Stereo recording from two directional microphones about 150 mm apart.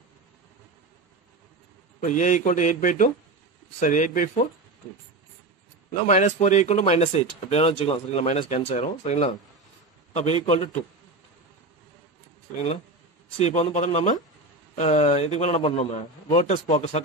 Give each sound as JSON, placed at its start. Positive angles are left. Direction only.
{"t": 2.0, "sound": "a man's voice", "side_deg": 55}
{"t": 5.9, "sound": "speech", "side_deg": 50}
{"t": 13.4, "sound": "speech", "side_deg": 50}